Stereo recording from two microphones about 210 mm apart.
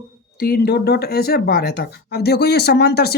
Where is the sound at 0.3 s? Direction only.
45° left (ahead or behind).